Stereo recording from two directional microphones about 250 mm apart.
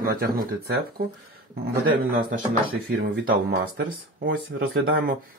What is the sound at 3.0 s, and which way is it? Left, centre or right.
Speech, right.